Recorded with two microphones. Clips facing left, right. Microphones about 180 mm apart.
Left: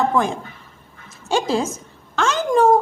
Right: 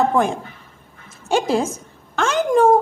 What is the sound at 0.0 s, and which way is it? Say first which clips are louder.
Speech: right 2 dB; 55° right (ahead or behind).